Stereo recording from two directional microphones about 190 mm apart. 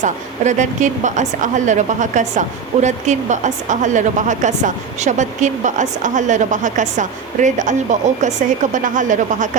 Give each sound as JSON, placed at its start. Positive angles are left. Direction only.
{"t": 0.0, "sound": "a woman's voice", "side_deg": -40}